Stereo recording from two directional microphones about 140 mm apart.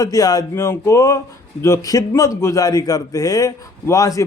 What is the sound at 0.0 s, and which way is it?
A man's voice, 25° left (ahead or behind).